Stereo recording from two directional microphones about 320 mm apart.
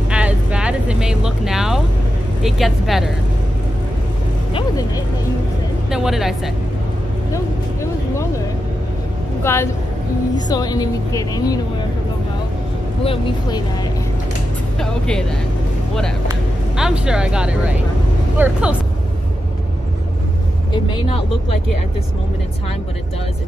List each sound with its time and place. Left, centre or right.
0.1 s vehicle: centre
2.4 s speech: centre
4.6 s a woman's voice: centre
5.9 s speech: centre
7.3 s vehicle: centre
9.4 s a woman's voice: centre
13.0 s a woman's voice: centre
14.8 s speech: centre
16.3 s speech: centre
20.7 s a woman's voice: centre